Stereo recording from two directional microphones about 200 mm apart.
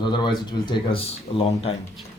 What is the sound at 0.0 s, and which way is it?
Speech, 20° left (ahead or behind).